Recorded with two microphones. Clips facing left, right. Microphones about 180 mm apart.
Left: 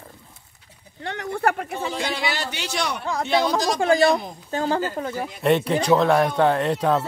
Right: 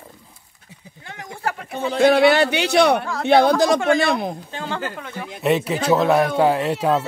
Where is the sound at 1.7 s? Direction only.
55° right (ahead or behind).